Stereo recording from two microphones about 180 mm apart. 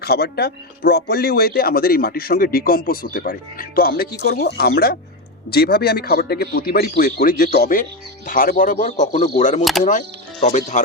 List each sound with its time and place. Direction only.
0.0 s a man's voice: 60° left (ahead or behind); by 10.8 s 40° left (ahead or behind)